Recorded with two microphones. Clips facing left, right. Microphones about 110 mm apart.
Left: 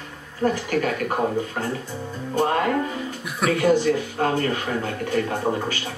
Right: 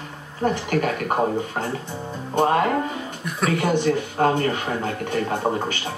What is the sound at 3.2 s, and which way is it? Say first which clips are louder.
Speech: right 2 dB; 5° left (ahead or behind).